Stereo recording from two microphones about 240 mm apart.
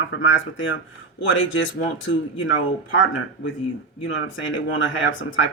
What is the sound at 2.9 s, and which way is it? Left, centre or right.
Speech, left.